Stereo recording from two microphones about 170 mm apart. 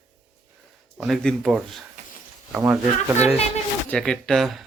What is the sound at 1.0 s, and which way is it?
Speech, centre (ahead or behind).